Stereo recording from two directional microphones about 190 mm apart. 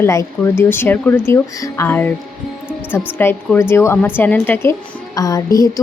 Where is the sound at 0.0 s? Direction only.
15° left (ahead or behind).